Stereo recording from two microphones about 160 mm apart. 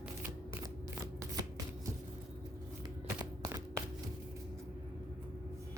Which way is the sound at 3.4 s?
25° right (ahead or behind).